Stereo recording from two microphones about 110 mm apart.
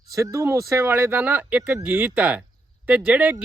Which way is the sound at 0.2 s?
25° right (ahead or behind).